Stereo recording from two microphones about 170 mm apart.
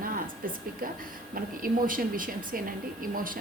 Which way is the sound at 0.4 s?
55° right (ahead or behind).